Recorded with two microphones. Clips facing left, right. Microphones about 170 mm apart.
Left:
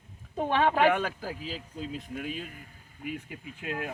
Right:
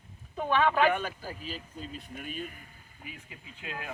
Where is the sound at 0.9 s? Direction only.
90° left.